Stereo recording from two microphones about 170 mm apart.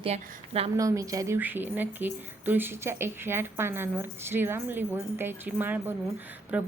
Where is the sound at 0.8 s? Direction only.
20° right (ahead or behind).